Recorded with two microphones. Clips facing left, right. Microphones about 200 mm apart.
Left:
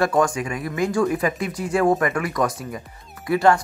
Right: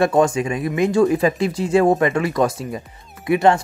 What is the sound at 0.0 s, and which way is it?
Speech, 25° right (ahead or behind).